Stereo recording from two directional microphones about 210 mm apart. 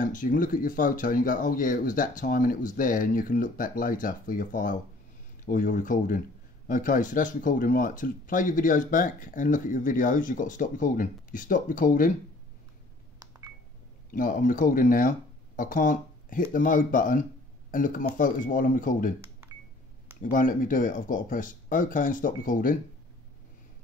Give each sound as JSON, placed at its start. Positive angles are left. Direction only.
{"t": 0.0, "sound": "speech", "side_deg": 40}
{"t": 14.1, "sound": "speech", "side_deg": 40}
{"t": 20.2, "sound": "speech", "side_deg": 40}